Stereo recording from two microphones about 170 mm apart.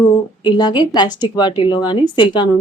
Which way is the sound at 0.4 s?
25° left (ahead or behind).